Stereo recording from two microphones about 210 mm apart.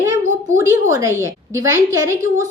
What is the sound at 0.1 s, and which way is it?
A woman's voice, 15° right (ahead or behind).